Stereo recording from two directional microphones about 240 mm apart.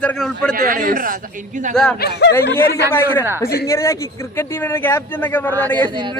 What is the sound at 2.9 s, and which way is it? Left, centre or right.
Speech, centre.